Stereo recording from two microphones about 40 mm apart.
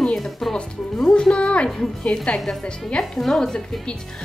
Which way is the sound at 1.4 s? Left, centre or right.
Left.